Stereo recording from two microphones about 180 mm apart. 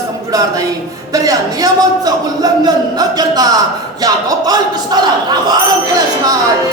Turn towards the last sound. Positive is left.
turn(degrees=-20)  # may be behind; listen again after turning